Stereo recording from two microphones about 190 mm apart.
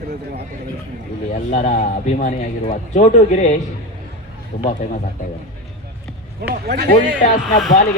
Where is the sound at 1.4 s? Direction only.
40° left (ahead or behind).